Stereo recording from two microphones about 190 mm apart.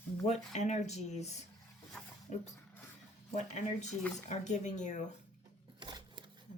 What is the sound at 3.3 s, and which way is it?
Speech, 40° left (ahead or behind).